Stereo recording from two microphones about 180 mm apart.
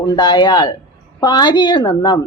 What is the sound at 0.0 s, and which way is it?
Speech, 20° left (ahead or behind).